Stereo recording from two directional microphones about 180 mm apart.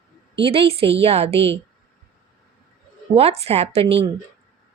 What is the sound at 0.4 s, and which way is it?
A woman's voice, 35° right (ahead or behind).